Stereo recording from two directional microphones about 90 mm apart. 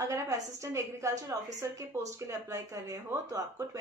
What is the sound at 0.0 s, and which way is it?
A woman's voice, 35° right (ahead or behind).